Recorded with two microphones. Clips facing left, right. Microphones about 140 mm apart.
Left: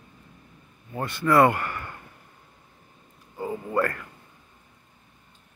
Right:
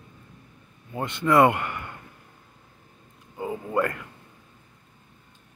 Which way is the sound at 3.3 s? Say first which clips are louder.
Even; 15° right (ahead or behind).